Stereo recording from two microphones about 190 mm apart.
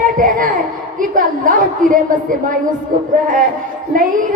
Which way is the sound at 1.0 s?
45° right (ahead or behind).